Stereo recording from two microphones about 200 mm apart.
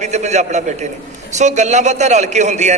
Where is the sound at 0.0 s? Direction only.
35° right (ahead or behind).